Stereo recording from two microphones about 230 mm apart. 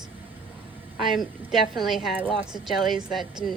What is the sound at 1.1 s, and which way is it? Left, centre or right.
A woman's voice, centre.